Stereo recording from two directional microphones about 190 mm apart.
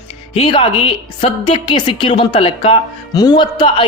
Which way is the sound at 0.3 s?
30° left (ahead or behind).